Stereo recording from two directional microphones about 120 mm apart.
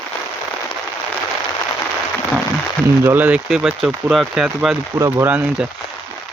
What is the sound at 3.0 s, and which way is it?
Speech, 15° right (ahead or behind).